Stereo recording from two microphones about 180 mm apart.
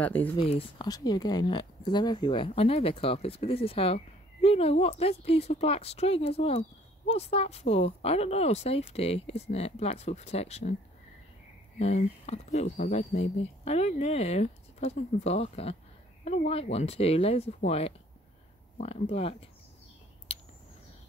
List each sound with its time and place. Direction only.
0.0 s speech: 10° left (ahead or behind)
0.4 s speech: 30° left (ahead or behind)
11.8 s speech: 40° left (ahead or behind)